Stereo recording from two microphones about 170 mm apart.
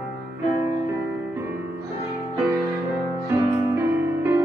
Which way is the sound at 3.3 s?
15° right (ahead or behind).